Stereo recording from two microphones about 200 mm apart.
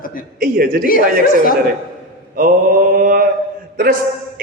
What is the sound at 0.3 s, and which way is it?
Speech, 50° right (ahead or behind).